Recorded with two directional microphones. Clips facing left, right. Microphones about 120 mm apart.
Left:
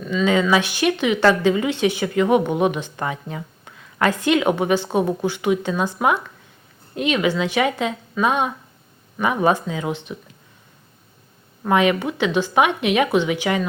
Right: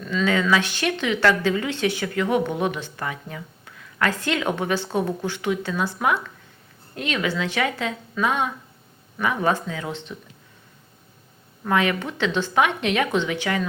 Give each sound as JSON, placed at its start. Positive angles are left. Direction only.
{"t": 0.0, "sound": "a sound", "side_deg": 5}
{"t": 0.3, "sound": "a woman's voice", "side_deg": 20}
{"t": 11.6, "sound": "a woman's voice", "side_deg": 20}